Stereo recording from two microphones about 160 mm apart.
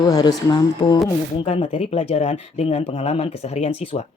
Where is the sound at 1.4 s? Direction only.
35° left (ahead or behind).